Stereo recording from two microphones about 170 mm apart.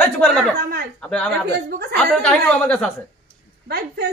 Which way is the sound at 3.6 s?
70° right (ahead or behind).